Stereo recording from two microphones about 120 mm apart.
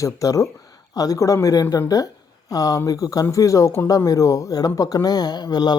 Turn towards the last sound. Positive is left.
turn(degrees=35)  # may be behind; listen again after turning